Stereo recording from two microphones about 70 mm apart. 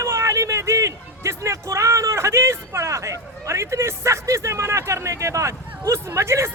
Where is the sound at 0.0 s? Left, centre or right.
Right.